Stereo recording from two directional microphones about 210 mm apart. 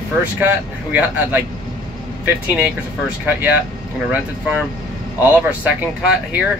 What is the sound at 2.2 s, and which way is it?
Speech, 5° right (ahead or behind).